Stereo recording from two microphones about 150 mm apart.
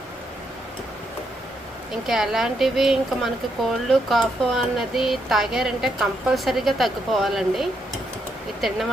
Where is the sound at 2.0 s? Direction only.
Centre (ahead or behind).